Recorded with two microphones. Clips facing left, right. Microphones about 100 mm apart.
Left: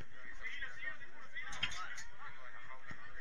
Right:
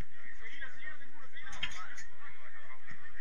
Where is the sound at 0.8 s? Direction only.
20° right (ahead or behind).